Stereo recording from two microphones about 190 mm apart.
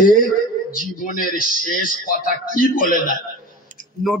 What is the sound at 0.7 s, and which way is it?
A man's voice, 45° left (ahead or behind).